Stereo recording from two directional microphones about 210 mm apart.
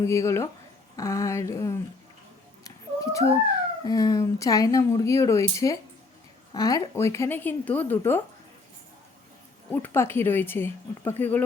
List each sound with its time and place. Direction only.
0.0 s speech: 15° left (ahead or behind)
2.6 s cat: 15° left (ahead or behind)
3.8 s speech: 15° left (ahead or behind)
9.7 s speech: 10° left (ahead or behind)